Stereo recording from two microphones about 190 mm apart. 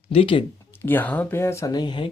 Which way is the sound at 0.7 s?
10° left (ahead or behind).